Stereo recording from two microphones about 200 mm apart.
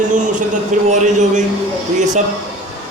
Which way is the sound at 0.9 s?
35° right (ahead or behind).